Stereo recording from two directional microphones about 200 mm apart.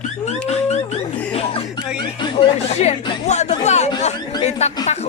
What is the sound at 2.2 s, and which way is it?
Speech, 30° left (ahead or behind).